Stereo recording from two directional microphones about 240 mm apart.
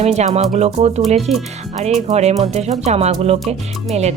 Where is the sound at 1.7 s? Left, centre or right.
Right.